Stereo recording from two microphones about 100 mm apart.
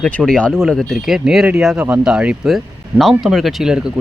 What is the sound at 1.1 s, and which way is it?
Speech, 5° right (ahead or behind).